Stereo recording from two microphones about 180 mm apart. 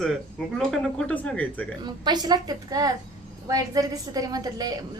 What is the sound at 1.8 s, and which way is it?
A woman's voice, 25° right (ahead or behind).